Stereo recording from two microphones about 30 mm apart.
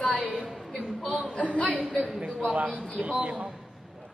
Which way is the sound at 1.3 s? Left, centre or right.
Left.